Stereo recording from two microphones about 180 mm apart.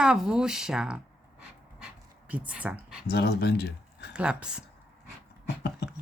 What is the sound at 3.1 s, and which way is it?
Speech, 65° left (ahead or behind).